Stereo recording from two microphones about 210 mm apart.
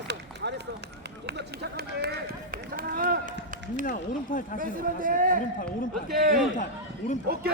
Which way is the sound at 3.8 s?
40° left (ahead or behind).